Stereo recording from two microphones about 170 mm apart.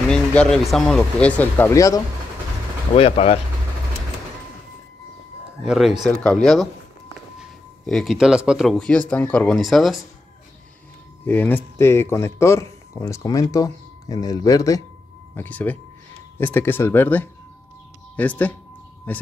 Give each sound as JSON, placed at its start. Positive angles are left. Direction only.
{"t": 0.1, "sound": "speech", "side_deg": 5}
{"t": 2.9, "sound": "speech", "side_deg": 35}
{"t": 5.7, "sound": "speech", "side_deg": 0}
{"t": 11.2, "sound": "speech", "side_deg": 10}
{"t": 15.3, "sound": "speech", "side_deg": 10}